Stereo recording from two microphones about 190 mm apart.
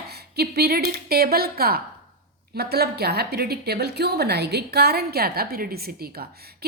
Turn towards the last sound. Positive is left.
turn(degrees=-55)  # may be behind; listen again after turning